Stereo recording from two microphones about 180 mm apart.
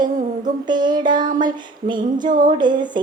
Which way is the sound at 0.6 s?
25° right (ahead or behind).